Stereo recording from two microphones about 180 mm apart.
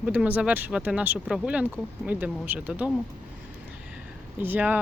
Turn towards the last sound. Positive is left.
turn(degrees=-10)  # may be behind; listen again after turning